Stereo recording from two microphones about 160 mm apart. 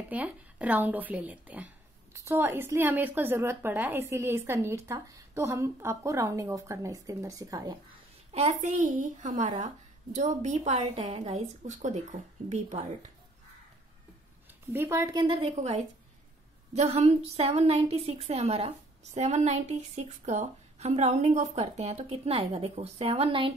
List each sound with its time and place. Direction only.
0.1 s a woman's voice: 10° right (ahead or behind)
8.3 s a woman's voice: 40° right (ahead or behind)
14.7 s a woman's voice: 15° right (ahead or behind)
15.5 s a woman's voice: 45° right (ahead or behind)